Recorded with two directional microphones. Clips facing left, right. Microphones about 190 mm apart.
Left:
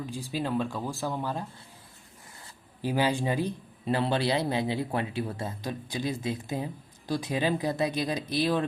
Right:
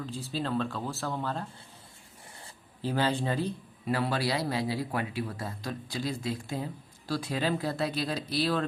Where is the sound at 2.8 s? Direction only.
15° left (ahead or behind).